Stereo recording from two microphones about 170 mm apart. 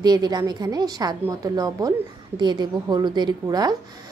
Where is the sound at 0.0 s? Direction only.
25° right (ahead or behind).